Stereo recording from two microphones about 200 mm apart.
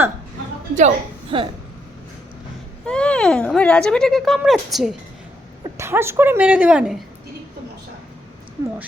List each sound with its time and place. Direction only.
0.8 s a woman's voice: 30° right (ahead or behind)
2.8 s speech: 5° left (ahead or behind)
5.7 s speech: 15° right (ahead or behind)